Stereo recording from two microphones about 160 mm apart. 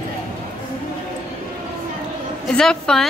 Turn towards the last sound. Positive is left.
turn(degrees=5)  # may be behind; listen again after turning